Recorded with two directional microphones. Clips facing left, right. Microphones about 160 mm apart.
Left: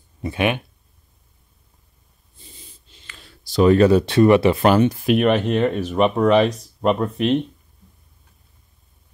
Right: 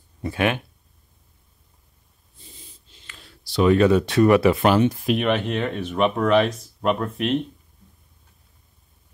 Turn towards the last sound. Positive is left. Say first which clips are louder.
# left 4 dB
turn(degrees=0)  # may be behind; listen again after turning